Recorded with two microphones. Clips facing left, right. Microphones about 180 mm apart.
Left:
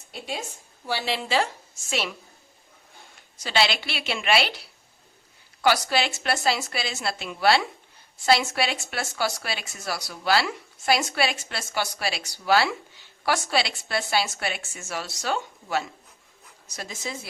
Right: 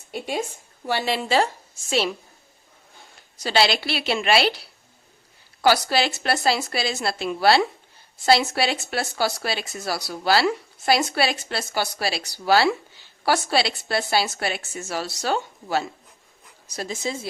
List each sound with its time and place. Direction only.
0.9 s a woman's voice: 50° right (ahead or behind)
1.9 s speech: 30° right (ahead or behind)
3.3 s speech: 35° right (ahead or behind)
5.6 s speech: 35° right (ahead or behind)